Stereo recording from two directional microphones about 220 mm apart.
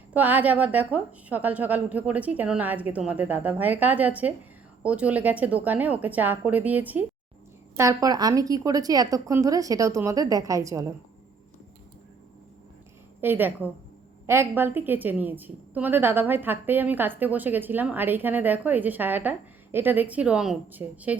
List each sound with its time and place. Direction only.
0.1 s a woman's voice: 5° right (ahead or behind)
13.2 s a woman's voice: 10° right (ahead or behind)